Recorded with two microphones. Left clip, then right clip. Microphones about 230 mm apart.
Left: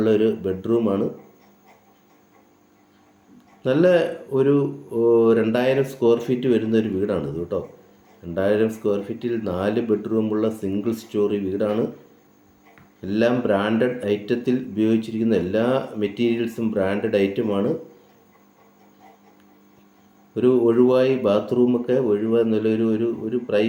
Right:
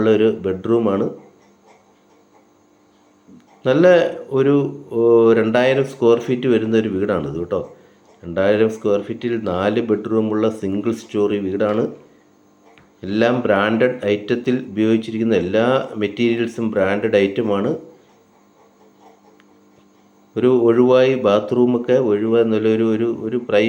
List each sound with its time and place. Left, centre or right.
0.0 s a man's voice: centre
3.6 s a man's voice: centre
13.0 s a man's voice: centre
20.3 s a man's voice: centre